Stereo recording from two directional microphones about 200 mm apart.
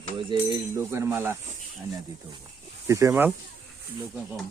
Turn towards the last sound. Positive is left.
turn(degrees=-10)  # may be behind; listen again after turning